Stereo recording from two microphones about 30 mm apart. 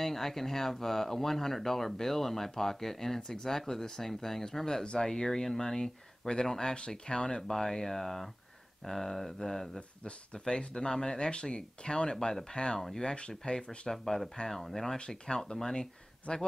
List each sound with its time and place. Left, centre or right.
0.0 s speech: centre
9.8 s speech: left
10.6 s speech: left
11.1 s speech: left
13.9 s speech: centre
15.0 s speech: left
16.3 s speech: left